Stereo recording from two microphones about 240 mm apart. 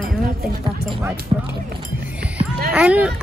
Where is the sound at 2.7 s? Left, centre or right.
Centre.